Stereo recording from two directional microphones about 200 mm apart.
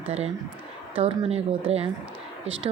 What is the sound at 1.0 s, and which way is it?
Speech, 30° right (ahead or behind).